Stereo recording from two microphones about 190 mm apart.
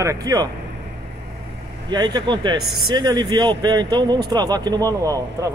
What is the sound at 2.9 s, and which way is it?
Speech, 25° right (ahead or behind).